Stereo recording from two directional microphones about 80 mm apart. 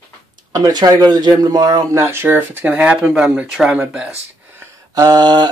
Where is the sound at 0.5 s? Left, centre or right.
Right.